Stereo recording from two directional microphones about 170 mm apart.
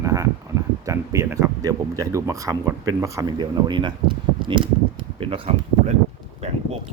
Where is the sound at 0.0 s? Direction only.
20° right (ahead or behind).